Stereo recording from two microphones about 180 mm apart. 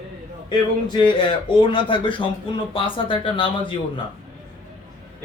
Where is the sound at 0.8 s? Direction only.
25° left (ahead or behind).